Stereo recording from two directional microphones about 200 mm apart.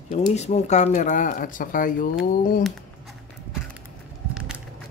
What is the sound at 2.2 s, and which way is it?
Chop, 45° left (ahead or behind).